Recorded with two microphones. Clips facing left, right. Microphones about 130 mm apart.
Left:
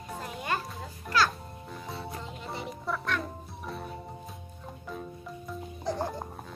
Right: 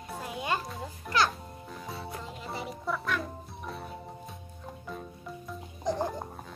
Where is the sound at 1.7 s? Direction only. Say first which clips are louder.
Left 1 dB; centre (ahead or behind).